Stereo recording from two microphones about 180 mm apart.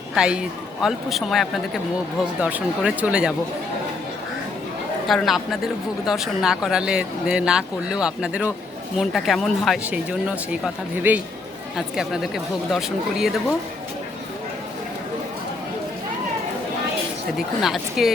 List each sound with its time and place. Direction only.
0.1 s speech: 5° right (ahead or behind)
5.0 s speech: centre (ahead or behind)
17.3 s speech: centre (ahead or behind)